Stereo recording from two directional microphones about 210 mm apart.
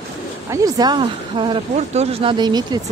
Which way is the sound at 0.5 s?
15° right (ahead or behind).